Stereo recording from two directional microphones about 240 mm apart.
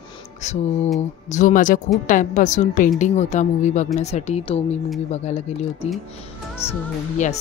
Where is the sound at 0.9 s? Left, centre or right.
Left.